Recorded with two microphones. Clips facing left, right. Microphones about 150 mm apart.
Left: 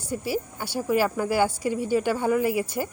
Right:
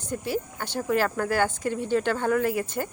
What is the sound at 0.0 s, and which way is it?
A woman's voice, 10° left (ahead or behind).